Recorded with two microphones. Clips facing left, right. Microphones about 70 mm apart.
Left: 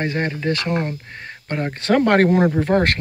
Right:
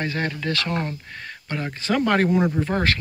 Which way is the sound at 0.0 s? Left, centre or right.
Left.